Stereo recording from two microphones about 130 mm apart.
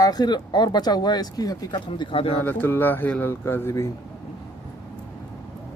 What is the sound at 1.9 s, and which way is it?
Speech, 40° left (ahead or behind).